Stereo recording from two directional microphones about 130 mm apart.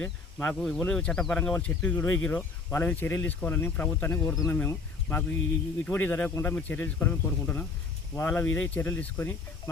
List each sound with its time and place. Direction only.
0.0 s speech: 10° left (ahead or behind)